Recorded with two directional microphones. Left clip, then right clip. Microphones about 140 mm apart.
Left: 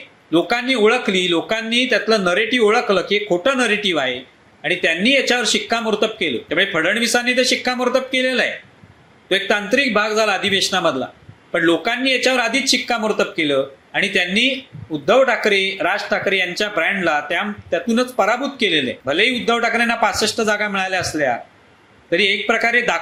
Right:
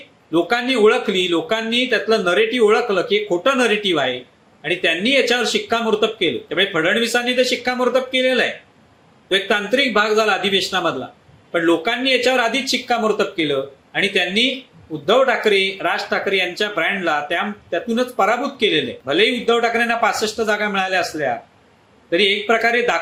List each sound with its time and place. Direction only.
0.3 s speech: 25° left (ahead or behind)